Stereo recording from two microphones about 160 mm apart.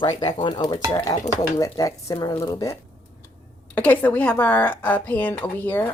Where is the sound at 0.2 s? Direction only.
25° left (ahead or behind).